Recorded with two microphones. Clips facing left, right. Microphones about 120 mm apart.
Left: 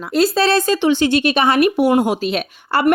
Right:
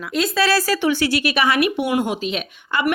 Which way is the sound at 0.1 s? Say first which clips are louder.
Left 4 dB; 30° left (ahead or behind).